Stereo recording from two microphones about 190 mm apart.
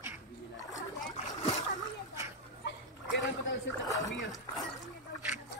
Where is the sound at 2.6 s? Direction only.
70° left (ahead or behind).